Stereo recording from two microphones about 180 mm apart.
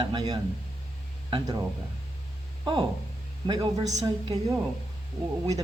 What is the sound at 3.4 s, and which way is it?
Speech, 20° right (ahead or behind).